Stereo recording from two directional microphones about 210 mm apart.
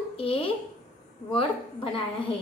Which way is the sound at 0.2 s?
25° left (ahead or behind).